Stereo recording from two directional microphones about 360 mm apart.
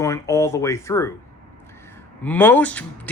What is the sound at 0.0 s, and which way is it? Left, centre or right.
Speech, centre.